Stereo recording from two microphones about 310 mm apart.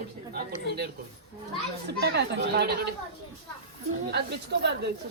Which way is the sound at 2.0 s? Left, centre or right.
Right.